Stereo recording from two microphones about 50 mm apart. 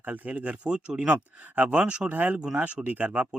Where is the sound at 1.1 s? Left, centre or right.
Right.